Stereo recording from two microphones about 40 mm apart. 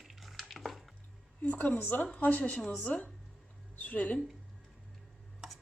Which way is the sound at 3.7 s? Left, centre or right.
Left.